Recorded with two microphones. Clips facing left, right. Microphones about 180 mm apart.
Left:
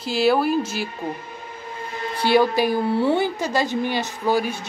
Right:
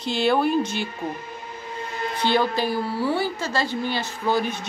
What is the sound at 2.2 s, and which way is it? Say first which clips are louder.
A woman's voice: left 4 dB; 10° left (ahead or behind).